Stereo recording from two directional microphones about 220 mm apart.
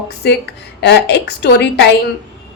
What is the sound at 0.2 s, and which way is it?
A woman's voice, 50° left (ahead or behind).